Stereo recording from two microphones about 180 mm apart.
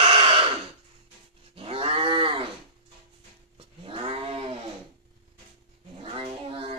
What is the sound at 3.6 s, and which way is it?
Cat, 30° right (ahead or behind).